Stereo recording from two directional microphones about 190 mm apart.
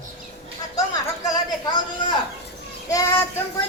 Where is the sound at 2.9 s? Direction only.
15° left (ahead or behind).